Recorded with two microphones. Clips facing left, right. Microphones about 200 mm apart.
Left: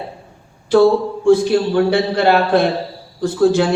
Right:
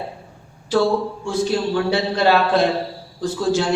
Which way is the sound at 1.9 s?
55° left (ahead or behind).